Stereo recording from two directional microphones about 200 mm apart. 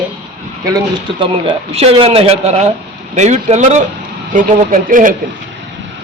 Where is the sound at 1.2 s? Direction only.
30° right (ahead or behind).